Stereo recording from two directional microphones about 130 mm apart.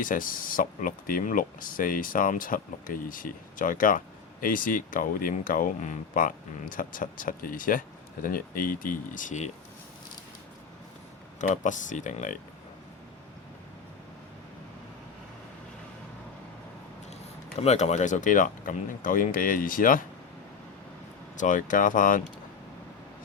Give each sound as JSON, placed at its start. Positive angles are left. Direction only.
{"t": 0.0, "sound": "speech", "side_deg": 90}
{"t": 11.3, "sound": "speech", "side_deg": 70}
{"t": 17.6, "sound": "speech", "side_deg": 55}
{"t": 21.3, "sound": "speech", "side_deg": 85}